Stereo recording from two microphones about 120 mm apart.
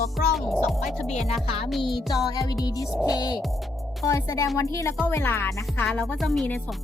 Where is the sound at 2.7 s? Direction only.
30° left (ahead or behind).